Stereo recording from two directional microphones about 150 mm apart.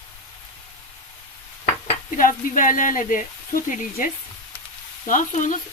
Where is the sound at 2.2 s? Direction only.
60° left (ahead or behind).